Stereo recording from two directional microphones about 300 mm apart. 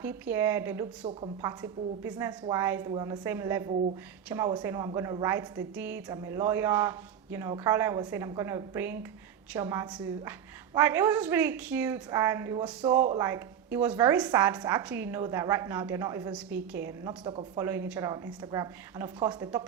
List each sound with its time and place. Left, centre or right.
0.0 s a woman's voice: centre